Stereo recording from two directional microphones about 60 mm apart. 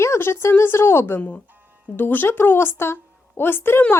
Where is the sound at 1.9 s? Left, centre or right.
Left.